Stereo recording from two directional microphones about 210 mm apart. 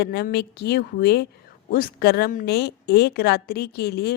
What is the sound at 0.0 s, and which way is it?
A woman's voice, 55° left (ahead or behind).